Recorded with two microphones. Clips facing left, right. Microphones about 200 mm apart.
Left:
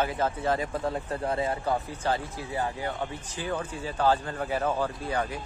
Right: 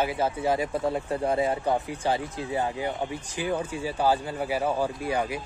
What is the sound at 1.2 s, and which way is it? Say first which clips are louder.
Speech: right 3 dB; 20° right (ahead or behind).